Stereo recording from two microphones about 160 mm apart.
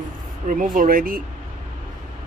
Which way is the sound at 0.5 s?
55° right (ahead or behind).